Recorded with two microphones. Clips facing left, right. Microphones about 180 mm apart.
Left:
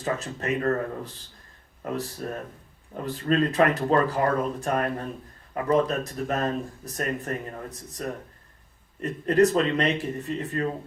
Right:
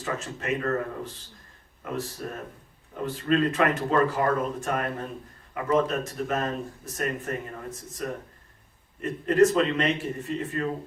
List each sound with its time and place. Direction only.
0.0 s speech: 35° left (ahead or behind)